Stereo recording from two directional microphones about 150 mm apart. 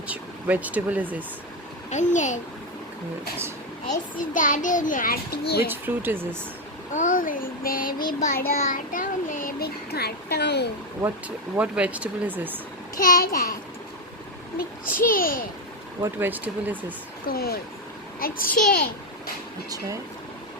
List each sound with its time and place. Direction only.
0.1 s speech: 10° right (ahead or behind)
1.9 s a child's voice: 55° left (ahead or behind)
3.8 s a child's voice: 60° left (ahead or behind); by 5.6 s 85° left
5.6 s speech: 15° right (ahead or behind)
6.9 s speech: 60° left (ahead or behind)
8.3 s a child's voice: 85° left
11.5 s speech: 10° right (ahead or behind)
13.0 s speech: 70° left (ahead or behind)
14.6 s speech: 70° left (ahead or behind)
16.0 s speech: 15° right (ahead or behind)
17.2 s a child's voice: 90° left
18.2 s speech: 75° left (ahead or behind)